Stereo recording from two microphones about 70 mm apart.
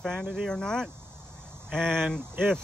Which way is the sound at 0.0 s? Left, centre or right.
Centre.